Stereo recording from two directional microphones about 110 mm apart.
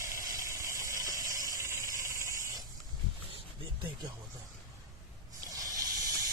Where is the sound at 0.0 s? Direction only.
30° right (ahead or behind).